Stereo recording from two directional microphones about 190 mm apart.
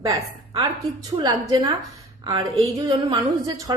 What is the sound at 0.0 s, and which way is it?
Speech, 15° right (ahead or behind).